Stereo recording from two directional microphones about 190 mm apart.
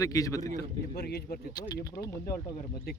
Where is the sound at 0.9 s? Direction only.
55° left (ahead or behind).